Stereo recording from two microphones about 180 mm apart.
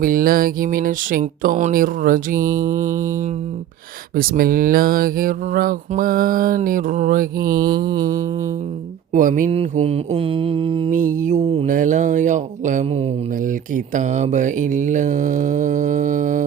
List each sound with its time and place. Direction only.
0.0 s speech: 50° right (ahead or behind)
4.1 s speech: 55° right (ahead or behind)
7.5 s mantra: 25° right (ahead or behind)
9.1 s speech: 45° right (ahead or behind)
9.5 s mantra: 35° right (ahead or behind)
10.9 s speech: 45° right (ahead or behind)
11.7 s speech: 45° right (ahead or behind)